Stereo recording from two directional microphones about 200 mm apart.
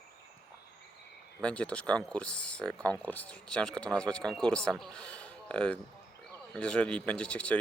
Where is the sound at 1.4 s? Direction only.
5° left (ahead or behind).